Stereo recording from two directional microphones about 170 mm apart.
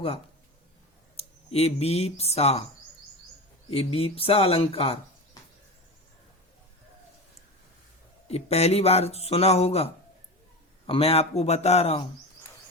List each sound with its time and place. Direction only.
1.1 s speech: 40° left (ahead or behind)
3.7 s speech: 35° left (ahead or behind)
8.3 s speech: 40° left (ahead or behind)